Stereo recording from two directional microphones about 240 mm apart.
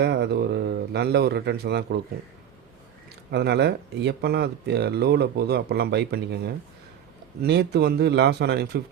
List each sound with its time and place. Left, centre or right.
0.0 s speech: right
3.3 s speech: right